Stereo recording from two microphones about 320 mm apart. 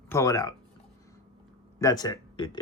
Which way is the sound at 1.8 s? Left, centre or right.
Centre.